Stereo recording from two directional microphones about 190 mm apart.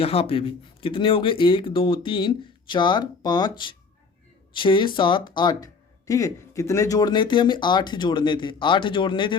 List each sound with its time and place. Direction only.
0.0 s speech: 30° left (ahead or behind)